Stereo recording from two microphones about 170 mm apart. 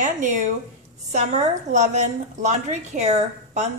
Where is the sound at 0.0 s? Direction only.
50° right (ahead or behind).